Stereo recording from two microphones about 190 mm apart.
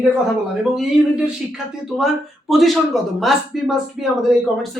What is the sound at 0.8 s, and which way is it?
Speech, centre (ahead or behind).